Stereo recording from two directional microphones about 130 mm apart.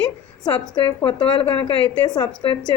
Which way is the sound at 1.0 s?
45° left (ahead or behind).